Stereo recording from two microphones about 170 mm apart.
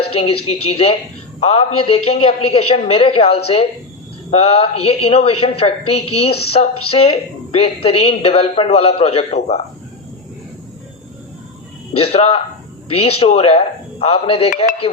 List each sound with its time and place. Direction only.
0.0 s speech: 35° left (ahead or behind)
11.9 s speech: 35° left (ahead or behind)